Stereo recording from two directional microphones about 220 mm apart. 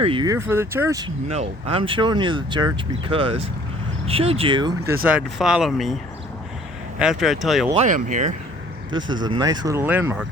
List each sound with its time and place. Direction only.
0.0 s speech: 20° right (ahead or behind)
1.3 s speech: 30° right (ahead or behind)
5.0 s speech: 5° right (ahead or behind)
7.0 s speech: centre (ahead or behind)
7.7 s speech: 30° right (ahead or behind)
9.0 s speech: 60° right (ahead or behind)
9.2 s speech: 20° right (ahead or behind)